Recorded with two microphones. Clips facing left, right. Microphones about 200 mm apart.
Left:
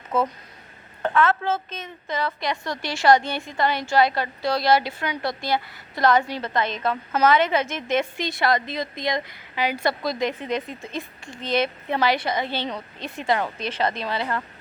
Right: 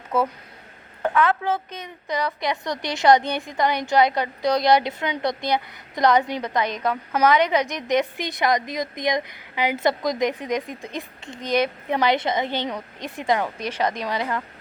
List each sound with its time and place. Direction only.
0.1 s a woman's voice: 10° right (ahead or behind)